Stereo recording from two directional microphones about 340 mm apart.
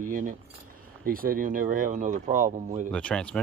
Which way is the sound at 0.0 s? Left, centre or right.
Right.